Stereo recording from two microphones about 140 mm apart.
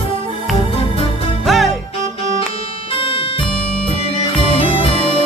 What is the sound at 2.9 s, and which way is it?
Music, 40° left (ahead or behind).